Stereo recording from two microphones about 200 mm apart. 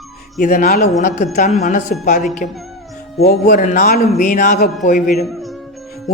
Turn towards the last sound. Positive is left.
turn(degrees=40)  # may be behind; listen again after turning